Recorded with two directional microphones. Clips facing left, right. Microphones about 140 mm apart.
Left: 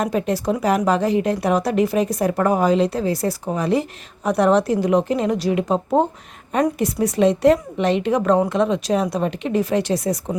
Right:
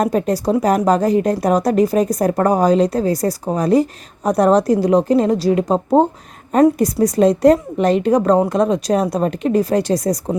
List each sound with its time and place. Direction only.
0.0 s a woman's voice: 40° right (ahead or behind)